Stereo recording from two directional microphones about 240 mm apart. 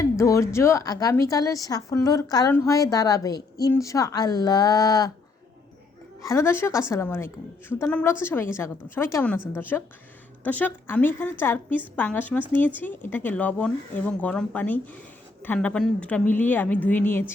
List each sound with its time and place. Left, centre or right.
0.0 s speech: centre
6.2 s speech: centre